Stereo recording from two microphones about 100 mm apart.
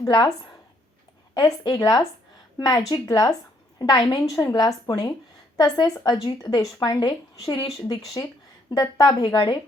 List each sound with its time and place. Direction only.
0.0 s a woman's voice: 40° left (ahead or behind)